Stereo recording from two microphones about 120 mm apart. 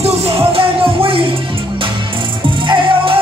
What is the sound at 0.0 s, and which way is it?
Music, 55° right (ahead or behind).